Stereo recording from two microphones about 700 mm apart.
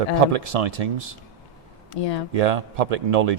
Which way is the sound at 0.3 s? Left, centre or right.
Right.